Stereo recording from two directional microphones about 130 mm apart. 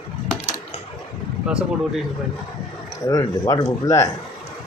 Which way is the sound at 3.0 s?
30° left (ahead or behind).